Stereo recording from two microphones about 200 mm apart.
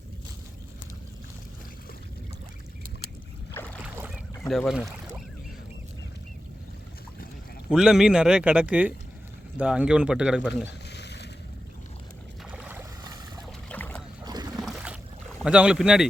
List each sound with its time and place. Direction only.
3.5 s boat: 10° left (ahead or behind)
3.9 s boat: 10° right (ahead or behind)
4.4 s speech: centre (ahead or behind)
7.7 s speech: centre (ahead or behind)
10.5 s a sound: 60° left (ahead or behind)
12.5 s boat: 5° right (ahead or behind)
13.7 s boat: 10° left (ahead or behind)
14.3 s boat: 20° right (ahead or behind)
14.6 s boat: 5° right (ahead or behind)
15.4 s speech: 5° right (ahead or behind)